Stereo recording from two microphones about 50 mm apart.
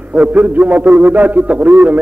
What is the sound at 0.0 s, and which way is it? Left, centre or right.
A man's voice, right.